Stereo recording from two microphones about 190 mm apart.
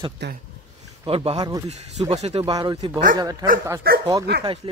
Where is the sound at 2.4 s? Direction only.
20° right (ahead or behind).